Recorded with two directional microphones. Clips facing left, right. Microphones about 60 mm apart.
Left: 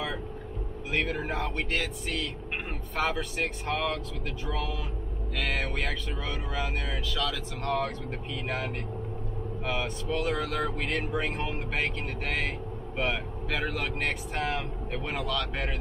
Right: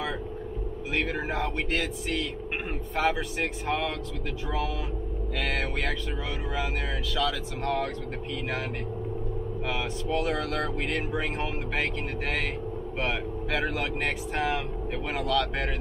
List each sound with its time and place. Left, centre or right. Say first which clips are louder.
0.9 s speech: right 1 dB; centre
5.4 s speech: right 1 dB; centre
7.2 s speech: right 5 dB; centre
9.7 s speech: even; centre